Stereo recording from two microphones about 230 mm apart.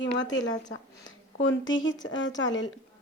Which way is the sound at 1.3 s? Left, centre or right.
Left.